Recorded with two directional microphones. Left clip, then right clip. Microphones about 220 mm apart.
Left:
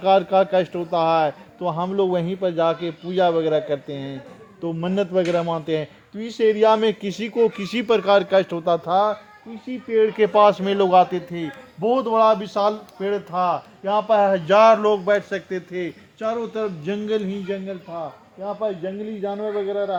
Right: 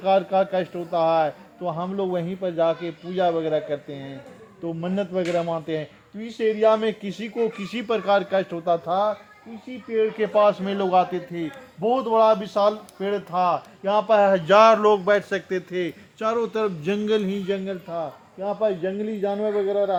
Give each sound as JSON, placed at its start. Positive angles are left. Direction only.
{"t": 0.0, "sound": "a man's voice", "side_deg": 45}
{"t": 11.8, "sound": "a man's voice", "side_deg": 25}